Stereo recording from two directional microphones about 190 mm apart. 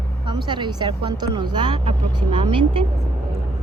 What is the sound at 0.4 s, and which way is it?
Speech, 25° right (ahead or behind).